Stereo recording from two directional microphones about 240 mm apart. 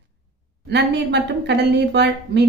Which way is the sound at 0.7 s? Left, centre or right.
Right.